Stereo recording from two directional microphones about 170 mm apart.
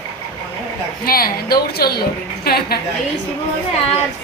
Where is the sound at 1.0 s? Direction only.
60° left (ahead or behind).